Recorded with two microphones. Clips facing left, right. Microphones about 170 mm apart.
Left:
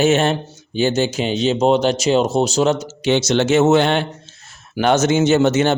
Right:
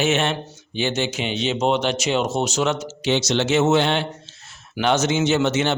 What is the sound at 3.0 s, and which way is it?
A man's voice, 50° left (ahead or behind).